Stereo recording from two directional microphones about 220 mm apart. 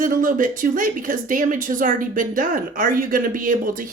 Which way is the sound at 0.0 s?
40° right (ahead or behind).